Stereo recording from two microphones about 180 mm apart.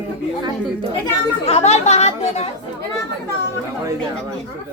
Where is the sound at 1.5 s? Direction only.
40° left (ahead or behind).